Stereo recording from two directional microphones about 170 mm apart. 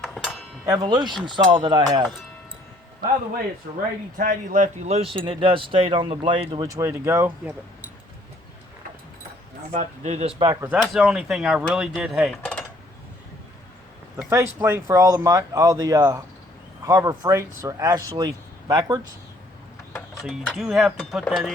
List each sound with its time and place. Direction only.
0.0 s music: centre (ahead or behind)
0.6 s speech: 20° right (ahead or behind)
4.2 s a man's voice: 50° right (ahead or behind)
5.1 s speech: 30° right (ahead or behind); by 7.3 s 15° right (ahead or behind)
9.7 s speech: 40° right (ahead or behind)
10.6 s speech: 10° right (ahead or behind)
14.3 s speech: 15° right (ahead or behind)
20.2 s speech: centre (ahead or behind)